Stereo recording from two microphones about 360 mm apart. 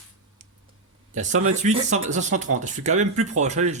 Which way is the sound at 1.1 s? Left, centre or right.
Centre.